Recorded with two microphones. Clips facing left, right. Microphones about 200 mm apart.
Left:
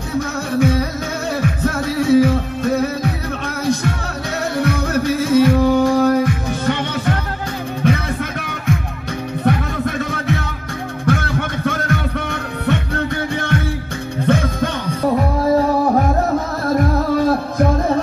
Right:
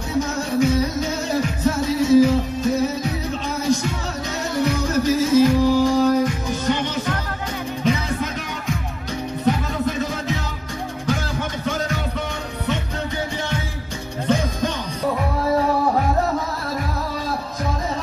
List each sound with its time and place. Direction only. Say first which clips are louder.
0.6 s music: left 1 dB; 60° left (ahead or behind)
4.6 s music: left 1 dB; 60° left (ahead or behind)
16.6 s music: left 9 dB; 55° left (ahead or behind)